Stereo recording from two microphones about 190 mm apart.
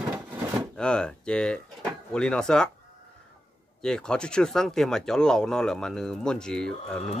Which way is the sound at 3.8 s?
5° left (ahead or behind).